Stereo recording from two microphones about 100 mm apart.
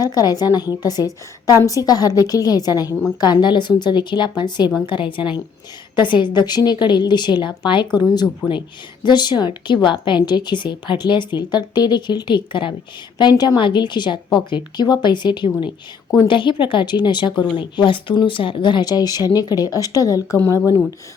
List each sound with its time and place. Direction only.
0.0 s speech: 40° left (ahead or behind); by 12.7 s 55° left (ahead or behind)
13.1 s speech: 45° left (ahead or behind)
13.6 s speech: 50° left (ahead or behind); by 20.4 s 35° left (ahead or behind)